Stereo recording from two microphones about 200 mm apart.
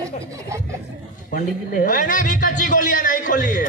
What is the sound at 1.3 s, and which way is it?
A man's voice, 45° left (ahead or behind).